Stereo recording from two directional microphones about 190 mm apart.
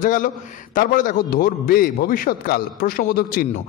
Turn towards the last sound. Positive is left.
turn(degrees=50)  # may be behind; listen again after turning